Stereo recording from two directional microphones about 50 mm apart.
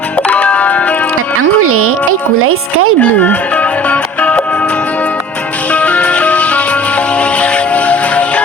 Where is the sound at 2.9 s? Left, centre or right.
Left.